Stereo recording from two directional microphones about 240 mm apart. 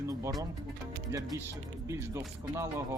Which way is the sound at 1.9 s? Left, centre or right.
Centre.